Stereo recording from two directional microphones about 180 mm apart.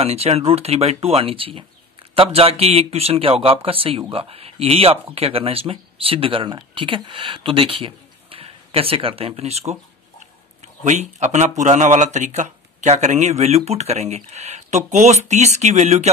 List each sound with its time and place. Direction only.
0.0 s speech: 35° right (ahead or behind)
10.8 s speech: 40° right (ahead or behind)